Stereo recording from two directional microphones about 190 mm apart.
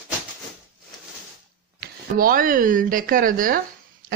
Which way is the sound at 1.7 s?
50° right (ahead or behind).